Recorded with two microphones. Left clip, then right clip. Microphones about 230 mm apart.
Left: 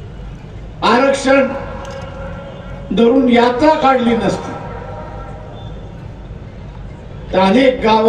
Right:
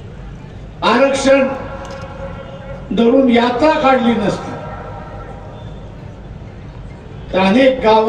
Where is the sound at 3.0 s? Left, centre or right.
Left.